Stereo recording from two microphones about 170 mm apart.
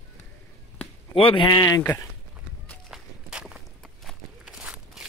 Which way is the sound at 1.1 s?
30° left (ahead or behind).